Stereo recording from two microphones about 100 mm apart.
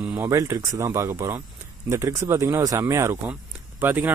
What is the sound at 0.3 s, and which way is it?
Speech, 30° right (ahead or behind).